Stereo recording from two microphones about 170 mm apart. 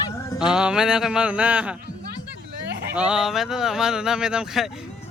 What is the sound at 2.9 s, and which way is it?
Speech, 5° right (ahead or behind).